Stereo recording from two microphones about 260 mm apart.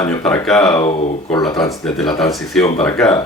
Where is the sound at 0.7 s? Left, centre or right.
Centre.